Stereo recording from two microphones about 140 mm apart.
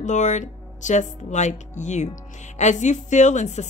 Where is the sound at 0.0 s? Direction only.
60° left (ahead or behind).